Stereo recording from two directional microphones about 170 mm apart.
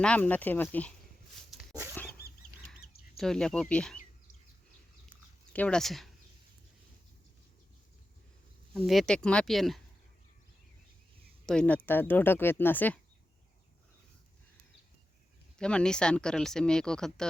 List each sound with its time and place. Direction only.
0.0 s speech: 10° left (ahead or behind)
2.2 s dog: 65° left (ahead or behind)
3.2 s speech: 5° left (ahead or behind)
5.5 s speech: 5° left (ahead or behind)
8.9 s speech: centre (ahead or behind)
11.4 s speech: 5° left (ahead or behind)
15.5 s speech: 5° left (ahead or behind)